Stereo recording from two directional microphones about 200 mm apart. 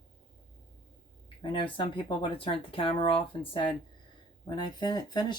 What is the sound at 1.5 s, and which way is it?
Speech, 25° left (ahead or behind).